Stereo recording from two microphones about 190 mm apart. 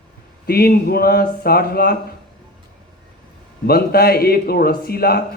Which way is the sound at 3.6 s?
55° left (ahead or behind).